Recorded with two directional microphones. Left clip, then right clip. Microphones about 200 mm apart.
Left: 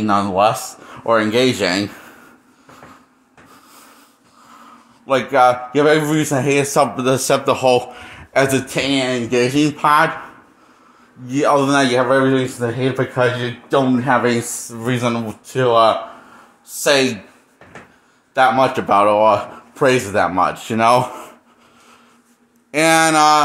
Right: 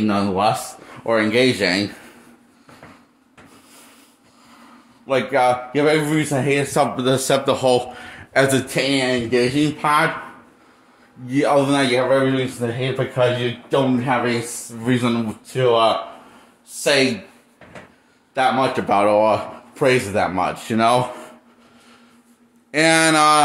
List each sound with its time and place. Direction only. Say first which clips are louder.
0.0 s a man's voice: left 4 dB; centre (ahead or behind)
5.0 s a man's voice: left 4 dB; 5° left (ahead or behind)
11.2 s speech: left 2 dB; centre (ahead or behind)
18.3 s a man's voice: left 4 dB; 10° left (ahead or behind)
22.7 s a man's voice: left 2 dB; 5° left (ahead or behind)